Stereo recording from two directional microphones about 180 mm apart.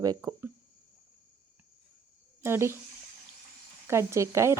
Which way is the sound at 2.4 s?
15° right (ahead or behind).